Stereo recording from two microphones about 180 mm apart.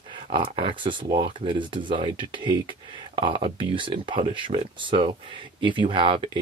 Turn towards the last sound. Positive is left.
turn(degrees=-25)  # may be behind; listen again after turning